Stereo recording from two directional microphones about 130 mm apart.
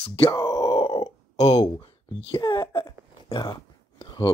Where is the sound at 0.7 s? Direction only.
45° left (ahead or behind).